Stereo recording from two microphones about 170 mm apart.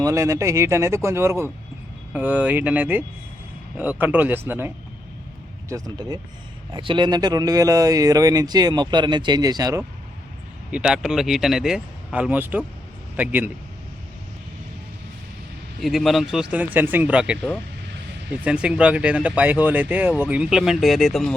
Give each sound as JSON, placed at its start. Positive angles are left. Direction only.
{"t": 0.0, "sound": "speech", "side_deg": -20}
{"t": 4.0, "sound": "speech", "side_deg": -10}
{"t": 10.7, "sound": "speech", "side_deg": -5}
{"t": 15.8, "sound": "speech", "side_deg": 0}